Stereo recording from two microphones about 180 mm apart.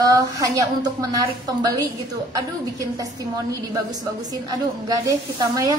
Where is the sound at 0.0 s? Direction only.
20° right (ahead or behind).